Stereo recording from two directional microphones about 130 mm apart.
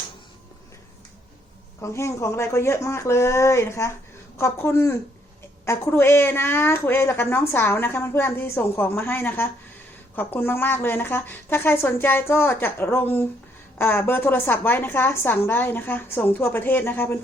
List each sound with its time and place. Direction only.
1.8 s a woman's voice: 20° left (ahead or behind)